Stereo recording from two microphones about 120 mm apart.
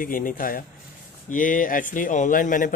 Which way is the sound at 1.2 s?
90° left.